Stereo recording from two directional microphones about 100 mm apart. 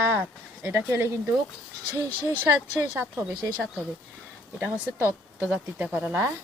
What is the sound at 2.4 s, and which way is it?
Speech, 20° right (ahead or behind).